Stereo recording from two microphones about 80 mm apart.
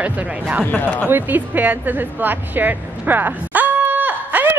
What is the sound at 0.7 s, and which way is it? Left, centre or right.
Speech, left.